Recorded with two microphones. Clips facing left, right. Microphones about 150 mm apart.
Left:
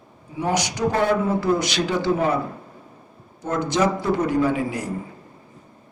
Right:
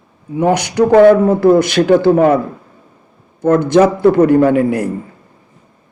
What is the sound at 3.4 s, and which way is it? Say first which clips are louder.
A man's voice: right 11 dB; 55° right (ahead or behind).